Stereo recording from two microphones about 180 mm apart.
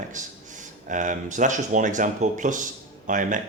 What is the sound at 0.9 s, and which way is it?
Speech, 45° right (ahead or behind).